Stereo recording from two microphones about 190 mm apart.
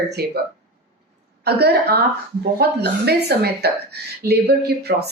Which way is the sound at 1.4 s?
60° right (ahead or behind).